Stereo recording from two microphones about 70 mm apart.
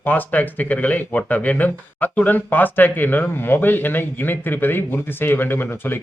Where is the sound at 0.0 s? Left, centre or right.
Left.